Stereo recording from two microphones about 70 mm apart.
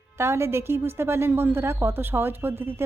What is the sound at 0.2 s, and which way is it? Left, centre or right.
A woman's voice, right.